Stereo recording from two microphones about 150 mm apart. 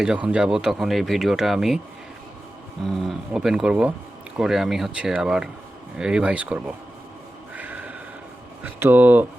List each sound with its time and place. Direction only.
0.0 s speech: 5° right (ahead or behind)
2.9 s speech: centre (ahead or behind)
7.5 s snort: 10° right (ahead or behind)
8.6 s speech: 10° right (ahead or behind)